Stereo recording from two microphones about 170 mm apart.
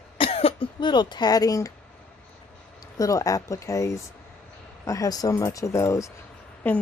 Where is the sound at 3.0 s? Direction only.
20° left (ahead or behind).